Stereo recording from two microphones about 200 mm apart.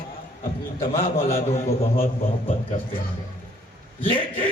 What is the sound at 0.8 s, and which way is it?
Music, 30° left (ahead or behind).